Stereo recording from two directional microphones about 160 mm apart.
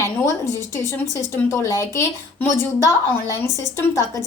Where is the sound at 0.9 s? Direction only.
20° left (ahead or behind).